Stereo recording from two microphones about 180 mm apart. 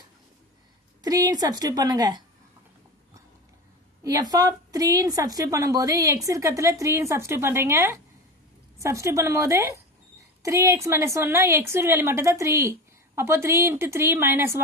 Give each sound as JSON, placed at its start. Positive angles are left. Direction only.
{"t": 1.0, "sound": "a woman's voice", "side_deg": -20}
{"t": 4.0, "sound": "a woman's voice", "side_deg": -20}